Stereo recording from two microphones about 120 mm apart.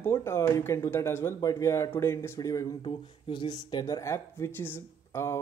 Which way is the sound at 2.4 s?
30° left (ahead or behind).